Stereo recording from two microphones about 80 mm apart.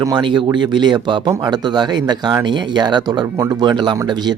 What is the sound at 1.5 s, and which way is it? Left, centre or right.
Speech, right.